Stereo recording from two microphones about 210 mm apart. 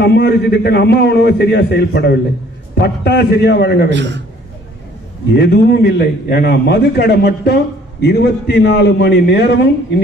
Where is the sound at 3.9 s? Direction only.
55° right (ahead or behind).